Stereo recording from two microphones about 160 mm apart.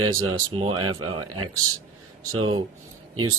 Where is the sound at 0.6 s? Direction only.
30° right (ahead or behind).